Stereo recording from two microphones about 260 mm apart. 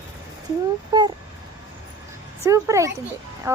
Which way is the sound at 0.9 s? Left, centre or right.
Centre.